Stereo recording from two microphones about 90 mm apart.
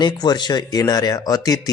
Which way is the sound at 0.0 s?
50° left (ahead or behind).